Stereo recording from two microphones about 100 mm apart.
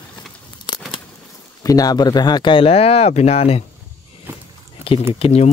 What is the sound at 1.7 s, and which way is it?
Speech, 40° left (ahead or behind).